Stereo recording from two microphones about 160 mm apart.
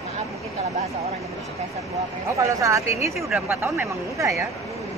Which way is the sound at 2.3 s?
20° right (ahead or behind).